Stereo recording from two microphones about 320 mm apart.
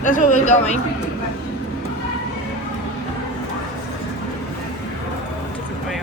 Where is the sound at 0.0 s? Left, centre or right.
Left.